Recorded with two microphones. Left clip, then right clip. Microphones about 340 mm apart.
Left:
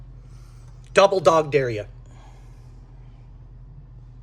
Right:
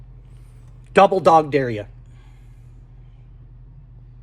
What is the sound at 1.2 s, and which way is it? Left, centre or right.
Speech, centre.